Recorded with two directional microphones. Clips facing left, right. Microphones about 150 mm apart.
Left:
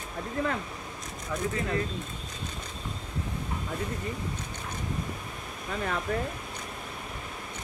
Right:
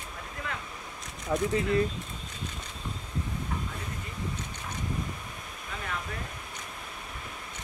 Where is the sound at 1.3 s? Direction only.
30° right (ahead or behind).